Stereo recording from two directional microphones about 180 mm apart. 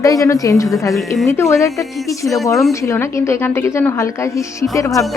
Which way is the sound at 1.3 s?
15° left (ahead or behind).